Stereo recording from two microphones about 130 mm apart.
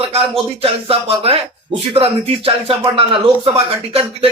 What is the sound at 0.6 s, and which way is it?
Speech, 50° right (ahead or behind).